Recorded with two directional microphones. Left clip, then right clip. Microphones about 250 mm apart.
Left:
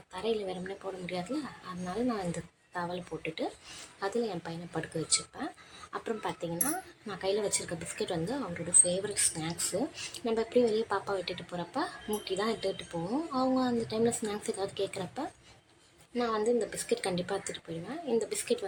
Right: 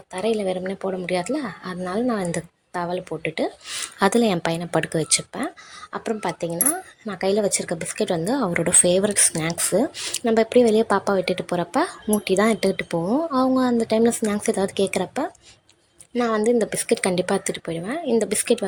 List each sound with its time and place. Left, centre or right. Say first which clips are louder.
0.1 s speech: right 10 dB; right